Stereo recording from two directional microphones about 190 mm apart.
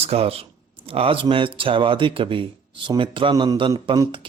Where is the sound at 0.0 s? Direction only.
30° right (ahead or behind).